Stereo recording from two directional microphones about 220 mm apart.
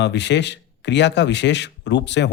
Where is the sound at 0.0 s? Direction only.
50° left (ahead or behind).